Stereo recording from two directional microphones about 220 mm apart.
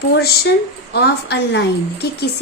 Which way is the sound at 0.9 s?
50° left (ahead or behind).